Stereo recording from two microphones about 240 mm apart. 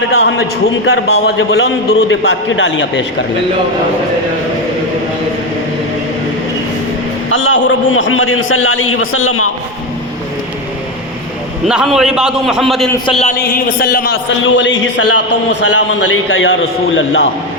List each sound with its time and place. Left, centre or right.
0.1 s a man's voice: left
7.3 s a man's voice: left
11.7 s a man's voice: centre
13.1 s speech: left
14.4 s a man's voice: left
15.7 s a man's voice: left